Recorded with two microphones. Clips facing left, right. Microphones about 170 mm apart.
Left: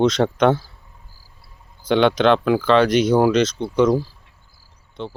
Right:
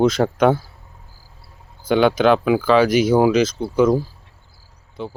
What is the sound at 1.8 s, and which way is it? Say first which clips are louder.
Speech: right 1 dB; 5° right (ahead or behind).